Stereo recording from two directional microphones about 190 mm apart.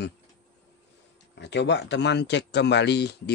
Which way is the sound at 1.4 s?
65° left (ahead or behind).